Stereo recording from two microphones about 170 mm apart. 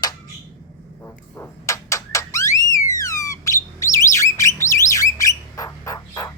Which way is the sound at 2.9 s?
20° left (ahead or behind).